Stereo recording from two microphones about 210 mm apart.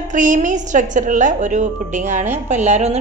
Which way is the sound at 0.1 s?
35° right (ahead or behind).